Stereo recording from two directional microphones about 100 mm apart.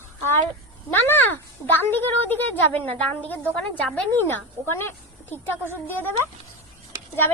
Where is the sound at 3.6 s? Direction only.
5° left (ahead or behind).